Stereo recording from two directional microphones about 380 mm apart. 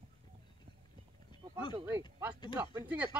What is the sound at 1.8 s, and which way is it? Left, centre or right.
Speech, centre.